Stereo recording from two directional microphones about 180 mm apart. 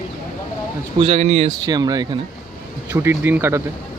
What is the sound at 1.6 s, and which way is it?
Speech, 20° right (ahead or behind).